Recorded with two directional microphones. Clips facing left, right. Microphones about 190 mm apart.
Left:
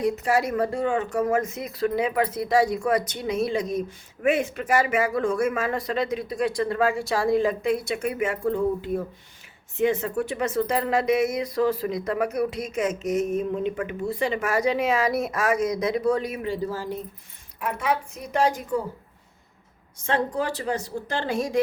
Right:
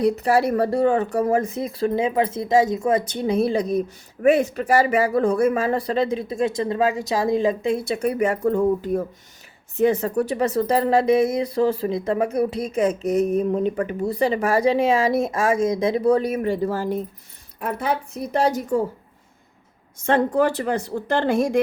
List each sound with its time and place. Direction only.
0.0 s speech: 35° right (ahead or behind)
16.4 s speech: 55° right (ahead or behind)
17.6 s speech: 35° right (ahead or behind)
20.1 s speech: 50° right (ahead or behind)